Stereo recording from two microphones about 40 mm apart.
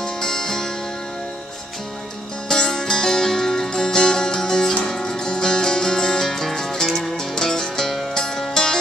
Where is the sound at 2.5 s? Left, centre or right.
Centre.